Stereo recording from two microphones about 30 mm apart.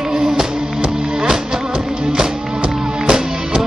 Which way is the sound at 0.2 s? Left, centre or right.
Centre.